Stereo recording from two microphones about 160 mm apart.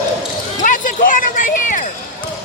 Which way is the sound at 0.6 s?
55° left (ahead or behind).